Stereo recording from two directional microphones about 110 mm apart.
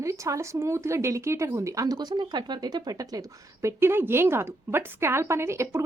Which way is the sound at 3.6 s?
20° right (ahead or behind).